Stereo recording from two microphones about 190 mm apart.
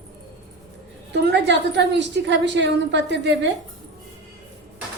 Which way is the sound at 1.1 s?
65° right (ahead or behind).